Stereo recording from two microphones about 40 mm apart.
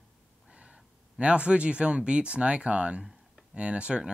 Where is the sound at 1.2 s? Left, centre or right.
Right.